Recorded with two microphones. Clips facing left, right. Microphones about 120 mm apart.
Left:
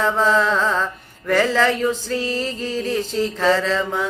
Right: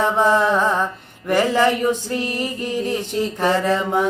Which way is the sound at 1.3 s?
15° right (ahead or behind).